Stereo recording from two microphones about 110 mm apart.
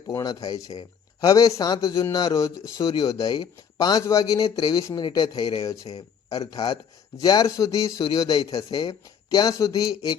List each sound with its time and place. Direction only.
0.2 s speech: 35° left (ahead or behind)
5.6 s speech: 30° left (ahead or behind)